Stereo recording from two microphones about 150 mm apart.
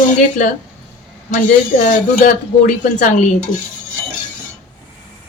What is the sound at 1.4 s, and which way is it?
Speech, 65° left (ahead or behind).